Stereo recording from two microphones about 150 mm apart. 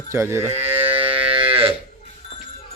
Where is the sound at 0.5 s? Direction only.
40° right (ahead or behind).